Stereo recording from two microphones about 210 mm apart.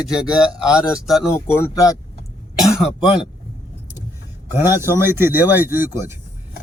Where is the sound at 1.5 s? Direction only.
15° left (ahead or behind).